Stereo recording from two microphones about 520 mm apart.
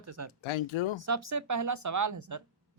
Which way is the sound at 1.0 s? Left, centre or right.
Right.